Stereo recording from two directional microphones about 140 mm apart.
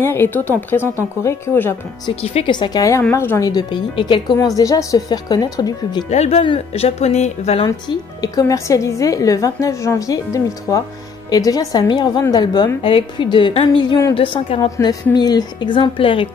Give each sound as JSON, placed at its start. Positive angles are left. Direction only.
{"t": 0.0, "sound": "speech", "side_deg": 15}
{"t": 2.2, "sound": "speech", "side_deg": 45}
{"t": 2.5, "sound": "a woman's voice", "side_deg": 30}
{"t": 6.0, "sound": "speech", "side_deg": 50}
{"t": 6.4, "sound": "speech", "side_deg": 40}
{"t": 7.6, "sound": "a woman's voice", "side_deg": 30}